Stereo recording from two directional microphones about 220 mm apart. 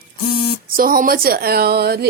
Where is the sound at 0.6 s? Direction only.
40° right (ahead or behind).